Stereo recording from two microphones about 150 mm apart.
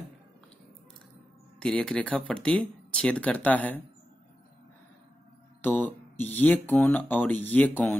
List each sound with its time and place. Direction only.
1.6 s speech: 5° left (ahead or behind)
5.6 s speech: 15° left (ahead or behind)